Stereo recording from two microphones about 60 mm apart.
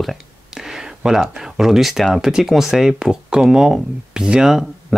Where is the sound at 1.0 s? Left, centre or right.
Centre.